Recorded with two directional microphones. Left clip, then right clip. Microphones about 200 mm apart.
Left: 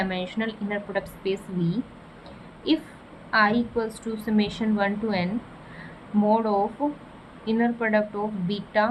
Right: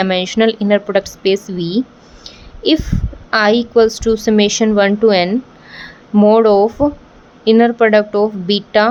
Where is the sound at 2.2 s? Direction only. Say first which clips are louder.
Right 17 dB; 60° right (ahead or behind).